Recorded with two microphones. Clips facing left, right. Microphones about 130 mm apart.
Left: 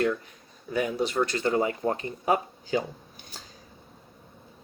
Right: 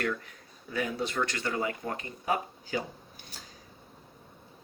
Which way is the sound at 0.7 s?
20° left (ahead or behind).